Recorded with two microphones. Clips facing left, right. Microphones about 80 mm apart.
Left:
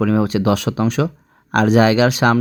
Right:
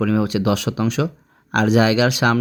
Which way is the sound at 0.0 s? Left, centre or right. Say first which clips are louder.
Left 2 dB; left.